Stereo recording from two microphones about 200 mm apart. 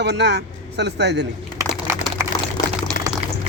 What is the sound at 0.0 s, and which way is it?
Speech, 60° right (ahead or behind).